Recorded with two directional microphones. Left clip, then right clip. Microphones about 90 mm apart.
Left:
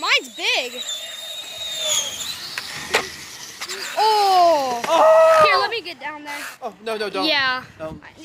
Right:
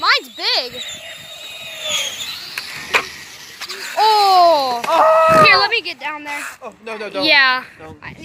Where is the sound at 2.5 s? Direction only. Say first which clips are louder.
Right 4 dB; 80° right.